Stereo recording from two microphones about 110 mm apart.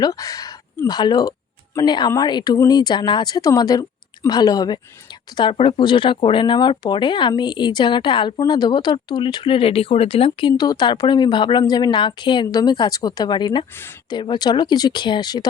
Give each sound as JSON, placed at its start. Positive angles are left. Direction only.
{"t": 0.0, "sound": "speech", "side_deg": 35}
{"t": 5.5, "sound": "speech", "side_deg": 50}